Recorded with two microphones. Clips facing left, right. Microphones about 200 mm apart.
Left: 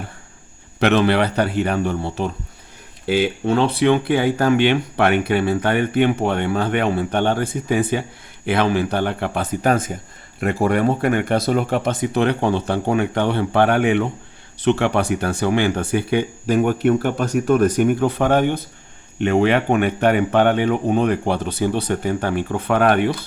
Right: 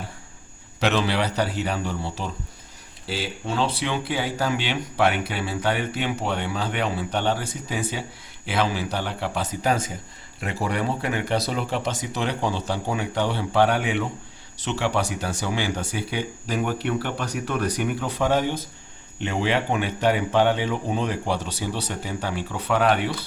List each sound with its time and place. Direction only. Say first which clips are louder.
0.8 s speech: left 7 dB; 55° left (ahead or behind)